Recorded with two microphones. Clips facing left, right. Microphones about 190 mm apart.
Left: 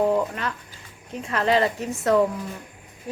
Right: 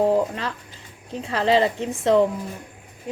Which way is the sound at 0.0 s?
30° right (ahead or behind).